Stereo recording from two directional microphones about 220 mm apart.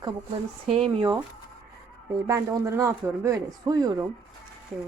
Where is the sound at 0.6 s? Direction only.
25° right (ahead or behind).